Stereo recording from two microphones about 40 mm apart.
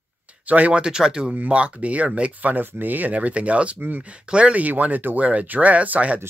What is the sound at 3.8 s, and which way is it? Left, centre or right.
Speech, right.